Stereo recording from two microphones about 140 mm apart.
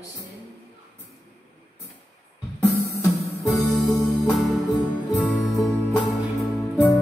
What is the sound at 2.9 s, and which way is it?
Music, 25° left (ahead or behind).